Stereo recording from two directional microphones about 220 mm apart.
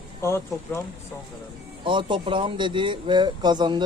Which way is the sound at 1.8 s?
20° right (ahead or behind).